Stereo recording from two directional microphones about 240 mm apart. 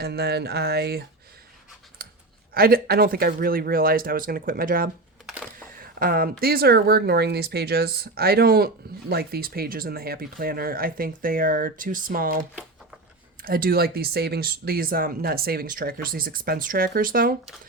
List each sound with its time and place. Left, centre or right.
0.0 s a sound: right
2.0 s clicking: right
2.6 s speech: right
5.8 s a sound: right
6.4 s speech: right
13.4 s speech: right